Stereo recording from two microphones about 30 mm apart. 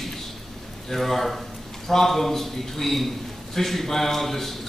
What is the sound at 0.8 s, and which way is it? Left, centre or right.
A man's voice, centre.